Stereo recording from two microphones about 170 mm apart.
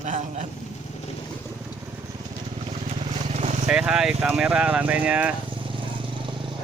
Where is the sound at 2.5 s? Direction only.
35° right (ahead or behind).